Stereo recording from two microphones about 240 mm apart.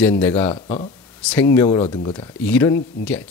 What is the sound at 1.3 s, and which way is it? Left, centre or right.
Speech, centre.